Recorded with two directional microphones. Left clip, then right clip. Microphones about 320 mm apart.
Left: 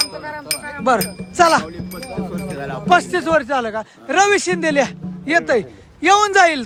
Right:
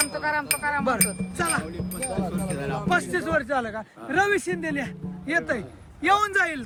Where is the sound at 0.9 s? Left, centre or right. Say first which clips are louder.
Left 12 dB; centre.